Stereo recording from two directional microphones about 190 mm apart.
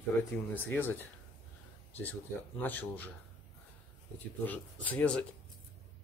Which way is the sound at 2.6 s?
10° left (ahead or behind).